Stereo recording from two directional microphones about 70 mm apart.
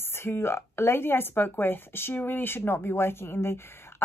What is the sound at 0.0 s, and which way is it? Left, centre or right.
Speech, left.